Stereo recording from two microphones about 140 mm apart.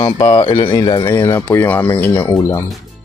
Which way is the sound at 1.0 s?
15° left (ahead or behind).